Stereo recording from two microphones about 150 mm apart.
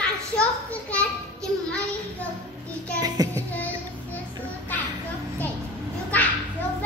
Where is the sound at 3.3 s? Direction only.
10° left (ahead or behind).